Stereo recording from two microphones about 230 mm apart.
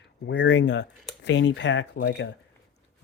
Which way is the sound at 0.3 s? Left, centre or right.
Left.